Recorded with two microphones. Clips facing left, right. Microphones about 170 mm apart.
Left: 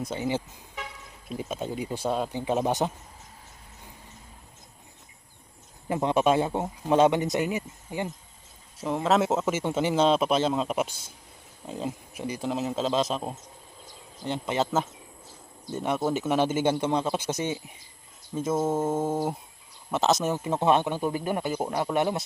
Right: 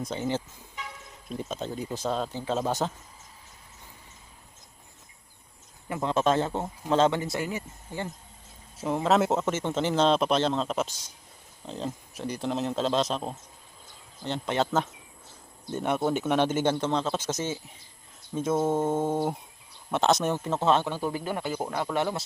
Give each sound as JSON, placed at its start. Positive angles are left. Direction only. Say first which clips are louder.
{"t": 0.1, "sound": "speech", "louder": "even", "side_deg": 10}
{"t": 5.9, "sound": "speech", "louder": "left 2 dB", "side_deg": 15}
{"t": 8.8, "sound": "speech", "louder": "even", "side_deg": 0}
{"t": 18.3, "sound": "speech", "louder": "even", "side_deg": 5}